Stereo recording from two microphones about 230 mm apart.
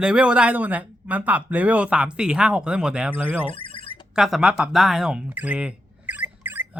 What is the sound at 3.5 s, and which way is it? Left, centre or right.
Alarm, left.